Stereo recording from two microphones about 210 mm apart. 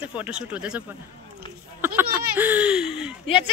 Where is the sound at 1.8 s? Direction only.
10° right (ahead or behind).